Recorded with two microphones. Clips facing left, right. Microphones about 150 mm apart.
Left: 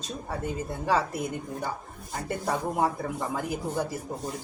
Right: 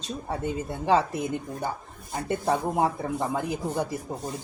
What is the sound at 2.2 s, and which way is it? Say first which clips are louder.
Speech: right 4 dB; 25° right (ahead or behind).